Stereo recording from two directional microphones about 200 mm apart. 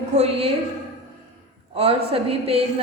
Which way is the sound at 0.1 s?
30° right (ahead or behind).